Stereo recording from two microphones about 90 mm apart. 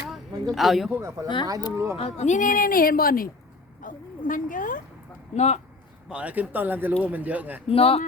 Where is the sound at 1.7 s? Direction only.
30° right (ahead or behind).